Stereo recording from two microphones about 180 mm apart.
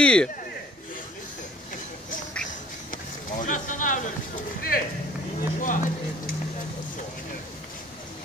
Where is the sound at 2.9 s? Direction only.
45° left (ahead or behind).